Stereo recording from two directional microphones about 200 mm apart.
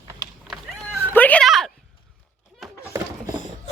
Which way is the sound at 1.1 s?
10° left (ahead or behind).